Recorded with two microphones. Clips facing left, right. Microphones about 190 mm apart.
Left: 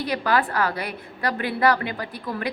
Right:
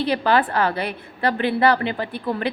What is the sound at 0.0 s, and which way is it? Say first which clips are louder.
A woman's voice: right 4 dB; 30° right (ahead or behind).